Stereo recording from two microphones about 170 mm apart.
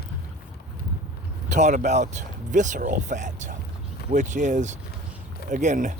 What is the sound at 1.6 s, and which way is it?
Speech, 45° right (ahead or behind).